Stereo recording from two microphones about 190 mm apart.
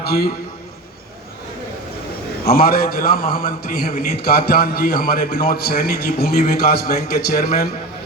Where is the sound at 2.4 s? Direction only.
50° left (ahead or behind).